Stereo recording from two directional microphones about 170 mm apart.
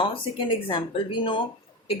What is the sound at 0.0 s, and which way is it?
Speech, 30° left (ahead or behind).